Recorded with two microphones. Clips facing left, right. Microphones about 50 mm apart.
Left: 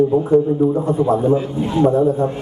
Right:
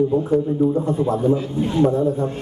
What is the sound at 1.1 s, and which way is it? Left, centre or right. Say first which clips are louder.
Speech: left 4 dB; left.